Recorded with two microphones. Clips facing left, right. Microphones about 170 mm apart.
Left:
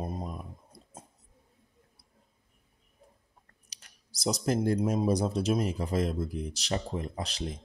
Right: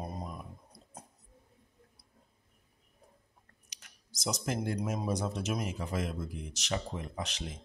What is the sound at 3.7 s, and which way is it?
Speech, 35° left (ahead or behind).